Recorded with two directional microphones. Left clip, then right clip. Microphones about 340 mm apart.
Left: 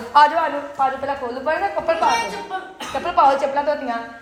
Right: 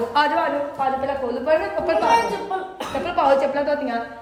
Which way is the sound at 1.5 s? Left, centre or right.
Centre.